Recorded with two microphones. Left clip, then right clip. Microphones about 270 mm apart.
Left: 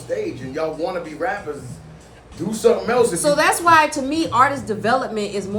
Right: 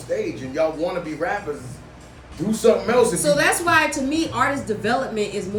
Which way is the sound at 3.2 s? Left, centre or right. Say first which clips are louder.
Left 2 dB; left.